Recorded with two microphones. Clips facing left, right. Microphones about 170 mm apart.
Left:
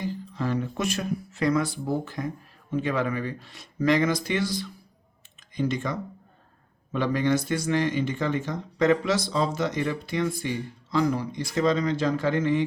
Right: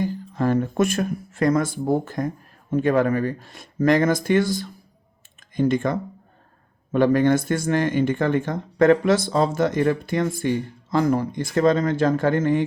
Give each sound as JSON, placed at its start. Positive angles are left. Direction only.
{"t": 0.0, "sound": "speech", "side_deg": -50}